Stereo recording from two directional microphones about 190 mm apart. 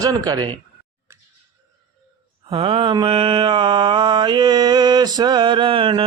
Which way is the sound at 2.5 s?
30° right (ahead or behind).